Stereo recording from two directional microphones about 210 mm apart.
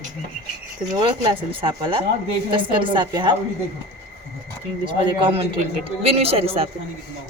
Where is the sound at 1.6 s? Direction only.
25° right (ahead or behind).